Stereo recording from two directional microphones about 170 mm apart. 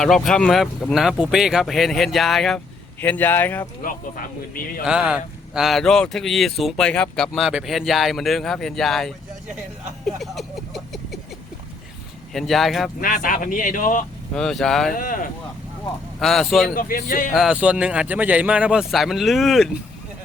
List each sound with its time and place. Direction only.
0.0 s speech: 5° left (ahead or behind)
3.8 s speech: 55° left (ahead or behind)
4.9 s speech: 5° right (ahead or behind)
12.3 s speech: centre (ahead or behind)
13.0 s speech: 55° left (ahead or behind)
14.3 s speech: 5° left (ahead or behind)
14.9 s speech: 55° left (ahead or behind)
16.2 s speech: centre (ahead or behind)
16.6 s speech: 55° left (ahead or behind)
17.3 s speech: 5° right (ahead or behind)